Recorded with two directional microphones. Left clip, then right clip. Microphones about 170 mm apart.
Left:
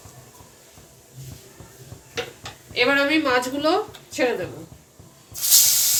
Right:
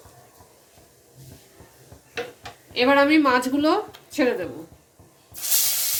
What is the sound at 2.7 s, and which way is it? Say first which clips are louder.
A woman's voice: right 2 dB; 90° right.